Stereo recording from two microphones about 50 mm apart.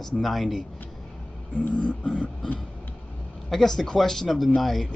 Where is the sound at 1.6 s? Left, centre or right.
Left.